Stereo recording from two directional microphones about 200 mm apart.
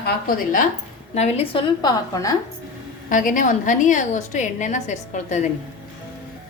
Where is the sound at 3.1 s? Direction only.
40° left (ahead or behind).